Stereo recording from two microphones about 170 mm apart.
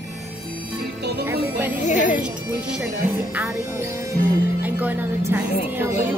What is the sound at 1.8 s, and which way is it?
Music, 45° left (ahead or behind).